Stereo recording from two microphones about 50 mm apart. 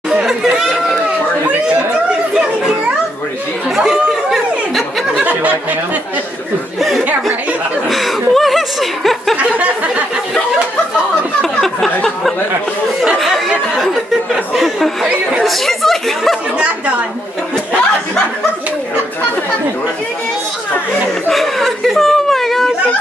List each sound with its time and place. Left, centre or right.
0.2 s chatter: centre
3.7 s chatter: centre
5.2 s a sound: right
7.9 s chuckle: centre
11.6 s a sound: centre
13.7 s chuckle: centre
15.4 s speech: centre
16.5 s a woman's voice: right
21.3 s snicker: centre